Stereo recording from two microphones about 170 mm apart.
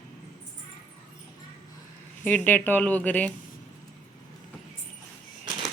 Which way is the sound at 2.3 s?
10° left (ahead or behind).